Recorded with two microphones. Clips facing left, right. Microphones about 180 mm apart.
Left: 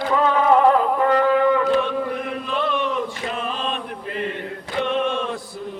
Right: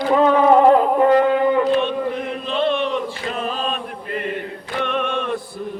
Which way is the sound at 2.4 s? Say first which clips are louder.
Right 5 dB; 25° right (ahead or behind).